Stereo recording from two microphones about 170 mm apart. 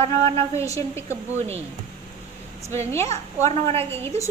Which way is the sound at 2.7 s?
15° left (ahead or behind).